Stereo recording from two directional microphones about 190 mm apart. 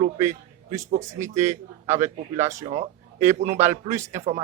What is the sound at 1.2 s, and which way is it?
Speech, 15° right (ahead or behind).